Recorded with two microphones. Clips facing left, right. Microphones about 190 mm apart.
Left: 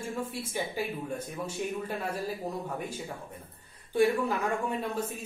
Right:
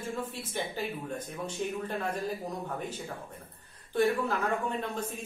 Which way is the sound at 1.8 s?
10° left (ahead or behind).